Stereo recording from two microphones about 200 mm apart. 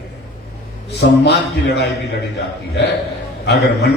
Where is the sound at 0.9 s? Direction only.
60° left (ahead or behind).